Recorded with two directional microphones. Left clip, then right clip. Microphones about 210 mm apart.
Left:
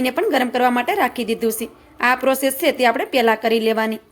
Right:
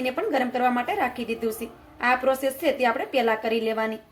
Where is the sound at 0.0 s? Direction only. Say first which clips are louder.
Left 6 dB; 45° left (ahead or behind).